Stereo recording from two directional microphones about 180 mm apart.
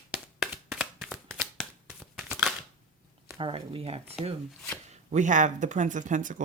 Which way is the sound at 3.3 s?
30° right (ahead or behind).